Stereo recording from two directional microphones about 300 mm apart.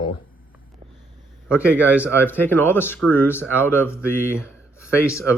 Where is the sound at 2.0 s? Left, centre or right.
Centre.